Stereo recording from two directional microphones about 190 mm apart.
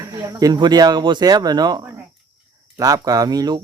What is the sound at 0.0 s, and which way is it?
Speech, 20° right (ahead or behind).